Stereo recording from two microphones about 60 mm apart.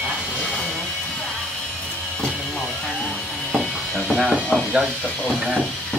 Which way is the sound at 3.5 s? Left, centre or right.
Centre.